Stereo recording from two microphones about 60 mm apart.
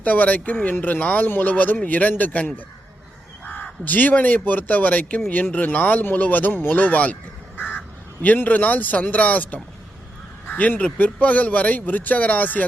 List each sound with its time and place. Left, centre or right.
0.0 s a man's voice: left